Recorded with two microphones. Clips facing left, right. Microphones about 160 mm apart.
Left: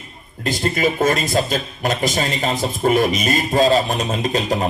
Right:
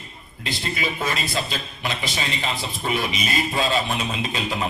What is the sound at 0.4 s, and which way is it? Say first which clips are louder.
A man's voice: left 9 dB; 45° left (ahead or behind).